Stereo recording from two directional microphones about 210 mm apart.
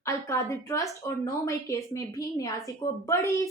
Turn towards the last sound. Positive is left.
turn(degrees=15)  # may be behind; listen again after turning